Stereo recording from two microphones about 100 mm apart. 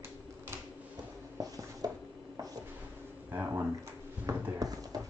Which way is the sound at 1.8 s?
40° right (ahead or behind).